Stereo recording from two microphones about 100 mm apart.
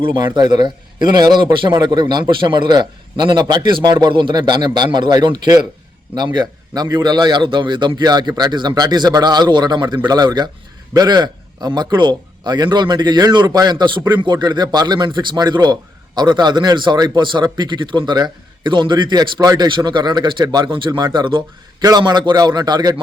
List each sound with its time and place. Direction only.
0.3 s a man's voice: 45° right (ahead or behind)
21.8 s a man's voice: 40° right (ahead or behind)